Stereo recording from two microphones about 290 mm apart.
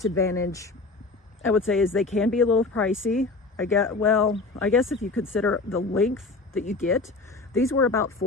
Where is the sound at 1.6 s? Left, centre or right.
Centre.